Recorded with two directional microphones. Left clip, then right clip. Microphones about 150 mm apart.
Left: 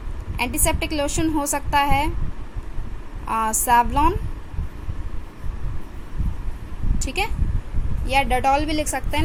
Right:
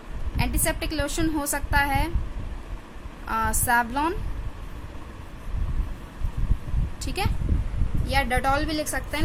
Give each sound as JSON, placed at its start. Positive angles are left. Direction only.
{"t": 0.3, "sound": "a woman's voice", "side_deg": 20}
{"t": 3.2, "sound": "a woman's voice", "side_deg": 15}
{"t": 7.0, "sound": "a woman's voice", "side_deg": 15}